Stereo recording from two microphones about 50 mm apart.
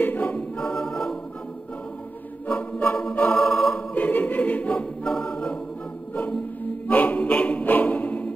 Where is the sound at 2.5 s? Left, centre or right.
Left.